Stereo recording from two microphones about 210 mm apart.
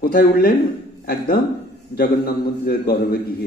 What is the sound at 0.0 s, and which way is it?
A man's voice, 45° left (ahead or behind).